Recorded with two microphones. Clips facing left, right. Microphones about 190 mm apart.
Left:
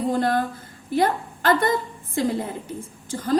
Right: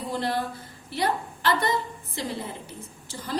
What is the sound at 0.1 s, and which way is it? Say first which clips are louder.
A woman's voice: left 3 dB; 45° left (ahead or behind).